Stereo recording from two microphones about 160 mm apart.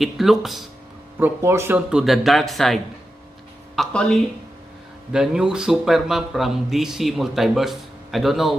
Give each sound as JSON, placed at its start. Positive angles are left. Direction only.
{"t": 0.0, "sound": "speech", "side_deg": 0}
{"t": 1.2, "sound": "speech", "side_deg": -15}
{"t": 1.9, "sound": "speech", "side_deg": -5}